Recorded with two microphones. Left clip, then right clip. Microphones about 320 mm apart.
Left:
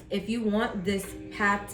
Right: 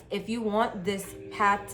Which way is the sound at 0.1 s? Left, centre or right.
Centre.